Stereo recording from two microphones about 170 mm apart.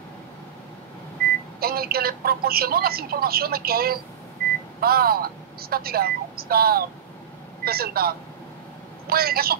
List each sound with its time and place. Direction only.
1.6 s speech: 65° right (ahead or behind)